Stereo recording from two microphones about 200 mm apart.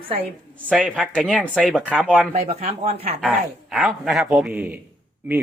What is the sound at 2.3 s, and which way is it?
Speech, 35° right (ahead or behind).